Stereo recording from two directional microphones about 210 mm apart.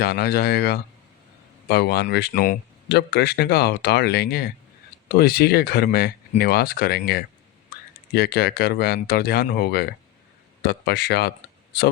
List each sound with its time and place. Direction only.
0.0 s speech: 50° left (ahead or behind)